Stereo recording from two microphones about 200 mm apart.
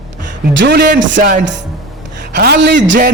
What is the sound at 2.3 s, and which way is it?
Speech, 55° right (ahead or behind).